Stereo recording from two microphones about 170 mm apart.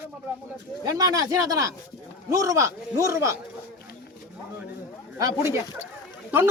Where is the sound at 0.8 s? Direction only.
20° right (ahead or behind).